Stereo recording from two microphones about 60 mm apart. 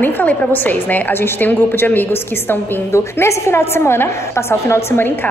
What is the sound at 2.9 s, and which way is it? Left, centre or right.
A woman's voice, left.